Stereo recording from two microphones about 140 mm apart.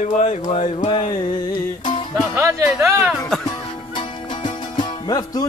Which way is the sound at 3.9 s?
35° left (ahead or behind).